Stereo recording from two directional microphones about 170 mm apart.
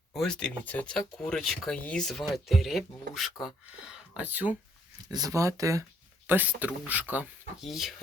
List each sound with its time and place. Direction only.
0.1 s speech: 5° left (ahead or behind)
5.1 s speech: 20° right (ahead or behind); by 7.9 s centre (ahead or behind)